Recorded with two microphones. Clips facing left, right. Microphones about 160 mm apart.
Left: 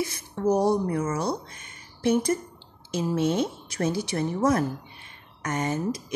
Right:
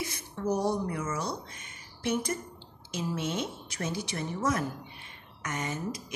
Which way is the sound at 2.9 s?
35° left (ahead or behind).